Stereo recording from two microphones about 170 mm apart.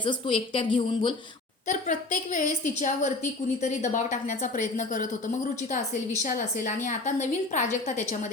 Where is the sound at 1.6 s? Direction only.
50° left (ahead or behind).